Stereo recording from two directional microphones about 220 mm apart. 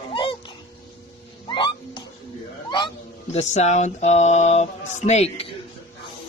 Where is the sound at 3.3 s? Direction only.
30° left (ahead or behind).